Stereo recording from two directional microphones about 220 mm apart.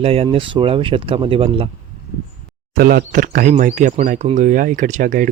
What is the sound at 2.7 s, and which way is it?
Speech, 40° right (ahead or behind).